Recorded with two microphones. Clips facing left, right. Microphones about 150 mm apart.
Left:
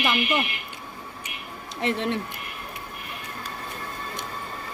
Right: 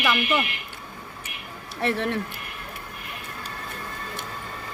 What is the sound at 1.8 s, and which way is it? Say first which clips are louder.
Speech: right 1 dB; 20° left (ahead or behind).